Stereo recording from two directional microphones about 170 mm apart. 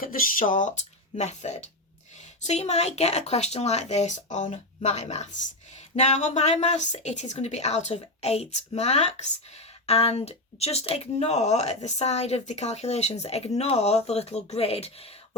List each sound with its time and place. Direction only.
0.0 s speech: 55° left (ahead or behind); by 15.4 s 35° left (ahead or behind)